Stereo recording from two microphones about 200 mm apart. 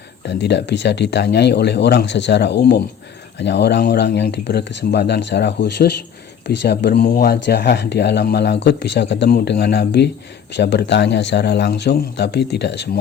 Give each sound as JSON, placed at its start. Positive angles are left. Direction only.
{"t": 0.3, "sound": "speech", "side_deg": 60}